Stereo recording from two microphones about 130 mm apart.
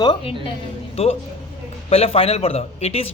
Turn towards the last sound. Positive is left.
turn(degrees=55)  # may be behind; listen again after turning